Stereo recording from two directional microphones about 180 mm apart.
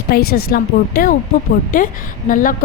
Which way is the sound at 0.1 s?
60° left (ahead or behind).